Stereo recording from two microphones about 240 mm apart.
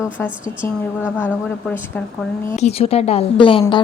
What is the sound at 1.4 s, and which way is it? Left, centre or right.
Speech, centre.